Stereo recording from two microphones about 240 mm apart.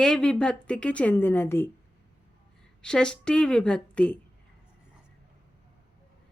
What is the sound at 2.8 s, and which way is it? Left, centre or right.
A woman's voice, centre.